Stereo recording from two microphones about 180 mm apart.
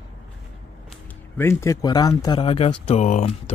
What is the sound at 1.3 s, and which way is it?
Speech, 15° left (ahead or behind).